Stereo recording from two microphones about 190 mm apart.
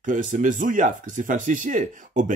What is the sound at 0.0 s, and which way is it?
Speech, 45° right (ahead or behind).